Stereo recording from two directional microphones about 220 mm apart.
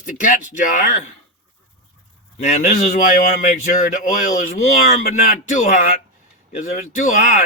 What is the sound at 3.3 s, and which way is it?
Speech, 35° left (ahead or behind).